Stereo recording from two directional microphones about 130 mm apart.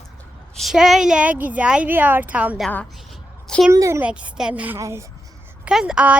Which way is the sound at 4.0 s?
10° right (ahead or behind).